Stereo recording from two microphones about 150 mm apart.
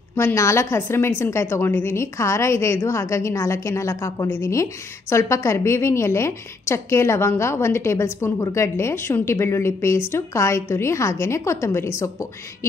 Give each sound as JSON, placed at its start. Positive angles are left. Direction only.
{"t": 0.1, "sound": "a woman's voice", "side_deg": 20}